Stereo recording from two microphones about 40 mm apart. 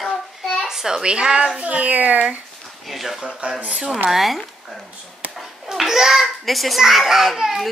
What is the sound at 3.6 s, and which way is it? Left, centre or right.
Speech, right.